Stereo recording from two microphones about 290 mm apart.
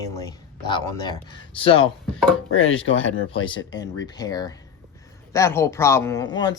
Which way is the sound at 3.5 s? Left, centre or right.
Centre.